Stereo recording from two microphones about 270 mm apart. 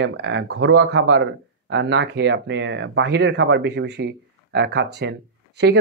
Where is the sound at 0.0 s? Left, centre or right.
Right.